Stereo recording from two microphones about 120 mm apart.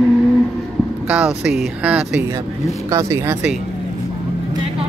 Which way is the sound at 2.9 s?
25° right (ahead or behind).